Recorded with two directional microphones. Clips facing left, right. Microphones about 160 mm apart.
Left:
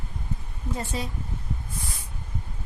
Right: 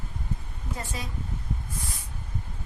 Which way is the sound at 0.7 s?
30° left (ahead or behind).